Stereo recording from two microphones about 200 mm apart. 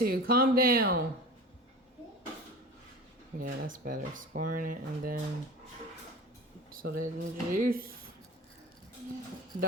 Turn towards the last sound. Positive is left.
turn(degrees=-45)  # may be behind; listen again after turning